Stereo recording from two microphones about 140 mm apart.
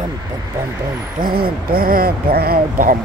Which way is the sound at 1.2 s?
90° right.